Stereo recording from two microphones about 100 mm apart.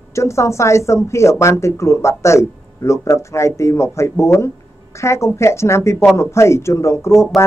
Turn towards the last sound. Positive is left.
turn(degrees=30)  # may be behind; listen again after turning